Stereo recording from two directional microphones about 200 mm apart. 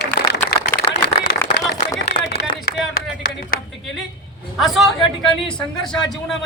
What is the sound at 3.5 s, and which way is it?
Speech, 45° left (ahead or behind).